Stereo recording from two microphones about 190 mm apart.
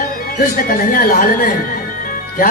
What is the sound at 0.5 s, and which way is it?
A man's voice, 50° left (ahead or behind).